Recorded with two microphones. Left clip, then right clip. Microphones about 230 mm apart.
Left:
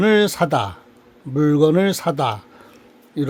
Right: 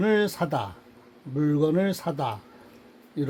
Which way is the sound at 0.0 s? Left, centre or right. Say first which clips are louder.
Left 8 dB; left.